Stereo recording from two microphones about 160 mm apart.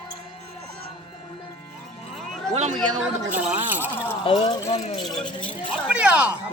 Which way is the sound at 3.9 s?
15° left (ahead or behind).